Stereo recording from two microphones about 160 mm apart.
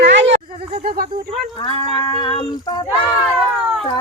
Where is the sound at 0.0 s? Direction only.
90° right.